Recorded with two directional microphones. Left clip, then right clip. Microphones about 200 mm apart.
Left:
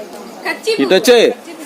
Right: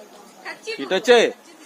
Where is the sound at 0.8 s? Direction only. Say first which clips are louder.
Left 6 dB; 20° left (ahead or behind).